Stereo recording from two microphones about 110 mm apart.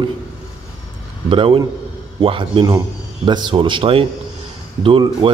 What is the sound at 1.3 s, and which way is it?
Speech, 50° right (ahead or behind).